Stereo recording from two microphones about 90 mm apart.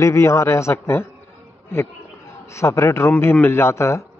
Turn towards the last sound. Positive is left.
turn(degrees=30)  # may be behind; listen again after turning